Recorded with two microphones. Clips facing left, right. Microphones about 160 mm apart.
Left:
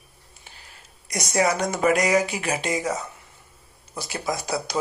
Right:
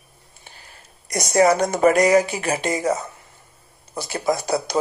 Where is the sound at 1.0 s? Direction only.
45° right (ahead or behind).